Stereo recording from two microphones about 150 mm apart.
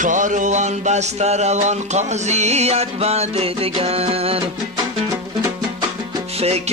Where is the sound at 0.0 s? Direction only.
55° right (ahead or behind); by 4.4 s 40° right (ahead or behind).